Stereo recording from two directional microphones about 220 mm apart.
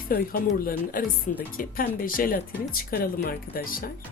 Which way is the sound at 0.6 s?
40° left (ahead or behind).